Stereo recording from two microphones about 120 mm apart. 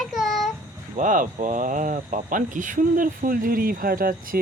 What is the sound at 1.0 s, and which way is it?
Speech, 90° right.